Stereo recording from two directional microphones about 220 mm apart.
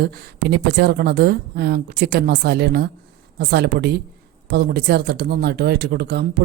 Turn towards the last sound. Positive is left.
turn(degrees=-50)  # may be behind; listen again after turning